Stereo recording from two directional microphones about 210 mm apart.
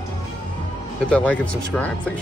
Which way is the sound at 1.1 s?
5° left (ahead or behind).